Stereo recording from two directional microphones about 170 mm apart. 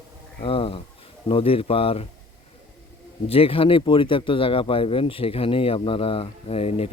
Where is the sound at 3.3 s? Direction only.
35° left (ahead or behind).